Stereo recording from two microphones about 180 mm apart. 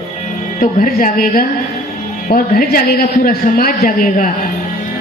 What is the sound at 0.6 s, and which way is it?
A man's voice, 50° left (ahead or behind).